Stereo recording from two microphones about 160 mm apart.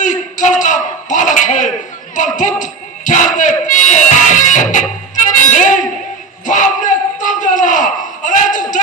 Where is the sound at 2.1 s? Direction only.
50° left (ahead or behind).